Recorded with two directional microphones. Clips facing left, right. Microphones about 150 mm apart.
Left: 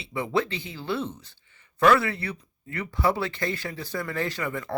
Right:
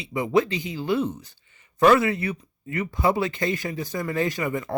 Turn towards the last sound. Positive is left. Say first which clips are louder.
# right 4 dB
turn(degrees=-15)  # may be behind; listen again after turning